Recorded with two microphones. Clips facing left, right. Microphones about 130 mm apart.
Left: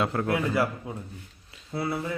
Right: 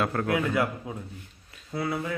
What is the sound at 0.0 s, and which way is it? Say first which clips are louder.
Speech: even; 20° left (ahead or behind).